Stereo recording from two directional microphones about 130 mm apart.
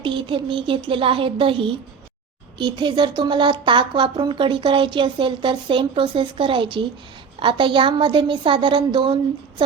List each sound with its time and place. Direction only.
0.0 s speech: 40° right (ahead or behind)